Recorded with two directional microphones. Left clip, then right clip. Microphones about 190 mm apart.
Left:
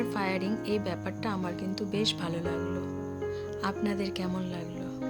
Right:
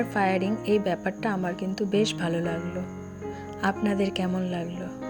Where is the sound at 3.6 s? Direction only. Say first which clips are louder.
Right 8 dB; 15° right (ahead or behind).